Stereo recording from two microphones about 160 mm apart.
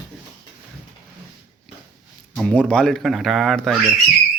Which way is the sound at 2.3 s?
5° left (ahead or behind).